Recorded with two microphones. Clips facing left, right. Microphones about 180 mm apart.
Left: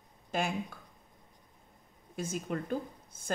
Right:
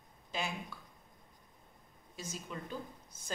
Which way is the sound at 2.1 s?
55° left (ahead or behind).